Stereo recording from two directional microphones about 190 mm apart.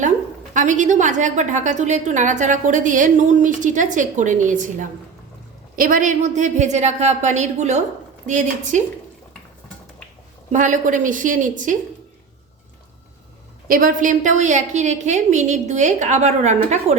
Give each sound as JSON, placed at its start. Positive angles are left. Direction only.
{"t": 0.5, "sound": "a woman's voice", "side_deg": -40}
{"t": 10.5, "sound": "a woman's voice", "side_deg": -40}
{"t": 13.7, "sound": "a woman's voice", "side_deg": -45}